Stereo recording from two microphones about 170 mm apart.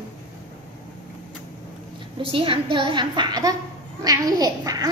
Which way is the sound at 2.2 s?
30° right (ahead or behind).